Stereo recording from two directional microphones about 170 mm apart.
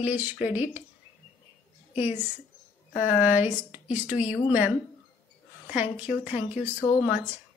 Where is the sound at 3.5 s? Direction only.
45° left (ahead or behind).